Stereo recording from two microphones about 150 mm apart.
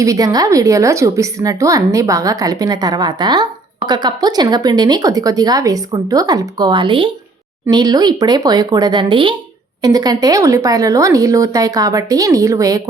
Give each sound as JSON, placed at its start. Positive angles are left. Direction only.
{"t": 0.0, "sound": "a woman's voice", "side_deg": -25}